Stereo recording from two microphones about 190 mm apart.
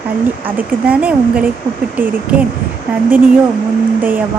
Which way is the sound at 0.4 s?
5° right (ahead or behind).